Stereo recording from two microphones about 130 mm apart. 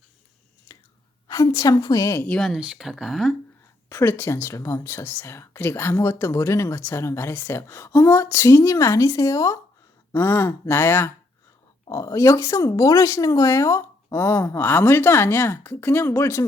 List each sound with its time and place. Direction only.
1.3 s speech: 25° left (ahead or behind)
2.2 s speech: 5° left (ahead or behind)
2.5 s speech: 5° right (ahead or behind)
3.8 s speech: 20° left (ahead or behind)